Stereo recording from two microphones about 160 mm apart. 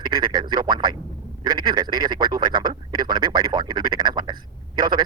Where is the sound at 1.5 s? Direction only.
25° right (ahead or behind).